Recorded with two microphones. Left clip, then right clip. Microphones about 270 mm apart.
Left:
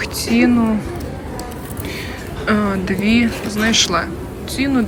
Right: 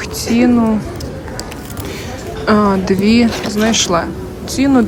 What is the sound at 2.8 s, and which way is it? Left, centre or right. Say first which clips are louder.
Speech: right 4 dB; centre.